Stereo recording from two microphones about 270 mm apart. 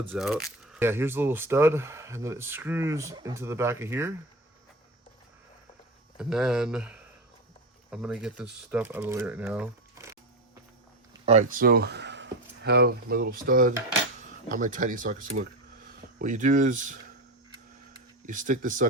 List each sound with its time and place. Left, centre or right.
0.1 s speech: centre
6.1 s speech: centre
11.1 s speech: right
18.3 s speech: right